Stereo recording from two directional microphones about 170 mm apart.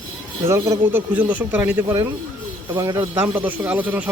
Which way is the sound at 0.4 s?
15° right (ahead or behind).